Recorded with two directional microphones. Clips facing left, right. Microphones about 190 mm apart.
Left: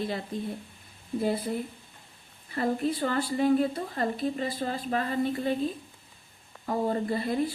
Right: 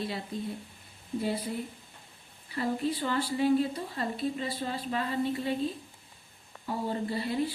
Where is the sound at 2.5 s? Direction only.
50° left (ahead or behind).